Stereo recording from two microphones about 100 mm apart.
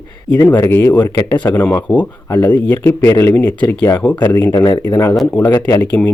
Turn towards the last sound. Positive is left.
turn(degrees=15)  # may be behind; listen again after turning